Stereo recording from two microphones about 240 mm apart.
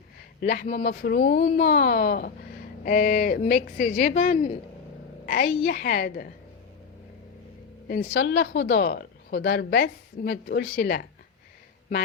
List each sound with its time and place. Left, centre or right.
0.4 s speech: left
7.9 s speech: left